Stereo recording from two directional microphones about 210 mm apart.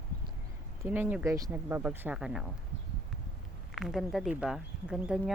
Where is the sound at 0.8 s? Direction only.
10° right (ahead or behind).